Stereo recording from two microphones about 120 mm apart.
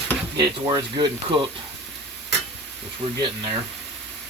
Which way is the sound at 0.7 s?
40° right (ahead or behind).